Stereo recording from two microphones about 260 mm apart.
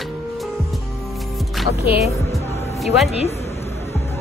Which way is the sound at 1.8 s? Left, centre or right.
Left.